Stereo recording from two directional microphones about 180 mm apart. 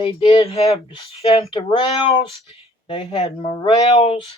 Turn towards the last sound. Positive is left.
turn(degrees=30)  # may be behind; listen again after turning